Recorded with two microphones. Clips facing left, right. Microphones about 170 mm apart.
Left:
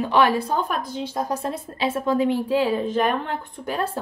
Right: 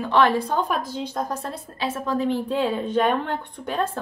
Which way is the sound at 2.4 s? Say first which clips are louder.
Left 2 dB; centre (ahead or behind).